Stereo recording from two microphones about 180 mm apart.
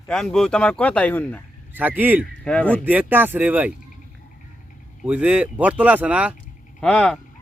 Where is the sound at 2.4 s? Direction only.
5° left (ahead or behind).